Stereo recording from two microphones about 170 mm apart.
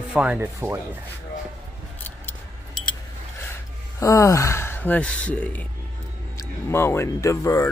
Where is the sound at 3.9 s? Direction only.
20° left (ahead or behind).